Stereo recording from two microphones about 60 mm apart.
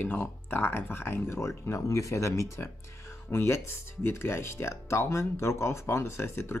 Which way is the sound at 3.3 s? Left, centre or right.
Left.